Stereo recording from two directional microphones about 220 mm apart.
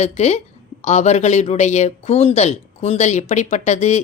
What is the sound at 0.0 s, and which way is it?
A woman's voice, 30° left (ahead or behind).